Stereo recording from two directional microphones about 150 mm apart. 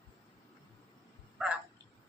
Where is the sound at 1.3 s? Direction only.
5° right (ahead or behind).